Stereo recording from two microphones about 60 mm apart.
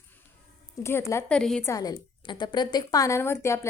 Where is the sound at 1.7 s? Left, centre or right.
Left.